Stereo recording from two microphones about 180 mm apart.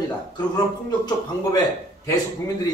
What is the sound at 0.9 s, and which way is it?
Speech, 20° left (ahead or behind).